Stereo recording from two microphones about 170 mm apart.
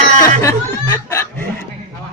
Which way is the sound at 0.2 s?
20° left (ahead or behind).